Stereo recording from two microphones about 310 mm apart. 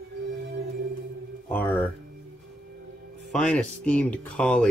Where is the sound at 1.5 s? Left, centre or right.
Centre.